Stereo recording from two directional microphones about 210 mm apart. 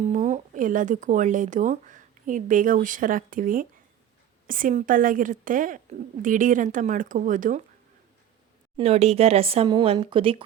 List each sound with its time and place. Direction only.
0.0 s a woman's voice: 35° right (ahead or behind)
8.8 s speech: 30° right (ahead or behind)